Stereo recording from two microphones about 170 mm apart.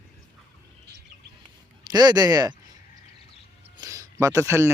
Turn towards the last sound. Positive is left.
turn(degrees=-15)  # may be behind; listen again after turning